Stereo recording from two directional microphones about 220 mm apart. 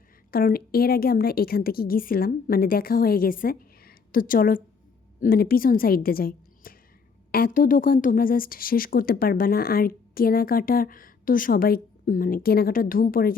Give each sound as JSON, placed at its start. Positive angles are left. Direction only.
{"t": 0.3, "sound": "a woman's voice", "side_deg": 45}